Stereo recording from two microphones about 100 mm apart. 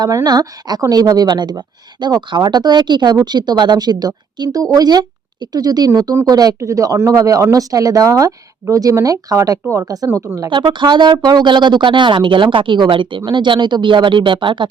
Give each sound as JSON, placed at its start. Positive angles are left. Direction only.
{"t": 0.0, "sound": "a woman's voice", "side_deg": -40}
{"t": 10.5, "sound": "speech", "side_deg": -50}